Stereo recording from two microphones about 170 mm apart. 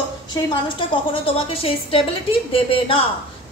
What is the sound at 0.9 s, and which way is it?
A woman's voice, 35° left (ahead or behind).